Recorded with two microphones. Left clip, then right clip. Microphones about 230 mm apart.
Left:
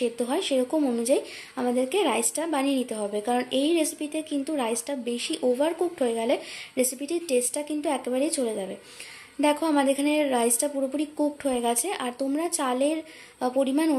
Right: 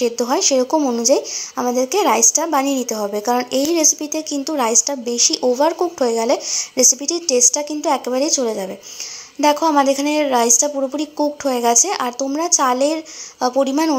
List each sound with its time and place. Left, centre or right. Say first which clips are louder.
0.0 s a woman's voice: right 9 dB; centre